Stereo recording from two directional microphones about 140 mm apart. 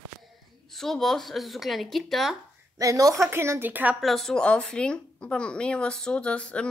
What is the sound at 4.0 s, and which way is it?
Speech, centre (ahead or behind).